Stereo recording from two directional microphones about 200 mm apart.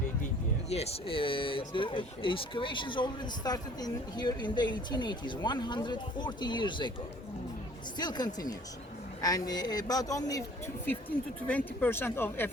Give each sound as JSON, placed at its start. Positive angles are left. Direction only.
{"t": 0.7, "sound": "speech", "side_deg": 30}
{"t": 7.9, "sound": "speech", "side_deg": 20}
{"t": 11.4, "sound": "speech", "side_deg": 10}